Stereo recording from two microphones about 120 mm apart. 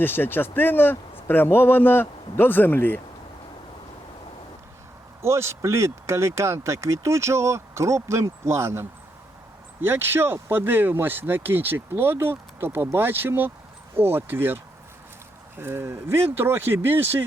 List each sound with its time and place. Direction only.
0.0 s a man's voice: 15° left (ahead or behind)
5.2 s speech: 20° right (ahead or behind)